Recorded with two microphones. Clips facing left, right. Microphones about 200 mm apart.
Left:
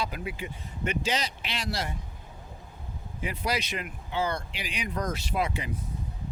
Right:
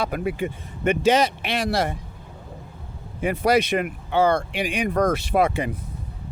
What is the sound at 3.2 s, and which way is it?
Speech, 55° right (ahead or behind).